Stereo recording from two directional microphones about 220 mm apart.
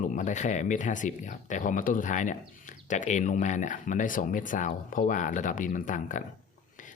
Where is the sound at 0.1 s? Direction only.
35° left (ahead or behind).